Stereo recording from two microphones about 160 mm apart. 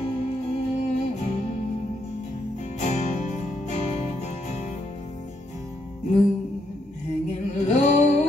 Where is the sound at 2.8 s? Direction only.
45° left (ahead or behind).